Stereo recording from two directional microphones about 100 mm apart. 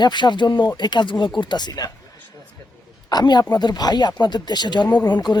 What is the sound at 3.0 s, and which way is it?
A woman's voice, 45° left (ahead or behind).